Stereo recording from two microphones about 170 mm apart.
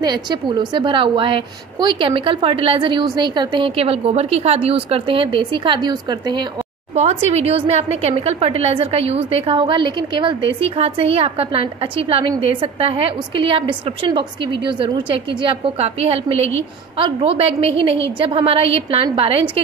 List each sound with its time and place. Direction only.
0.0 s a woman's voice: 25° right (ahead or behind)
7.0 s a woman's voice: 40° right (ahead or behind)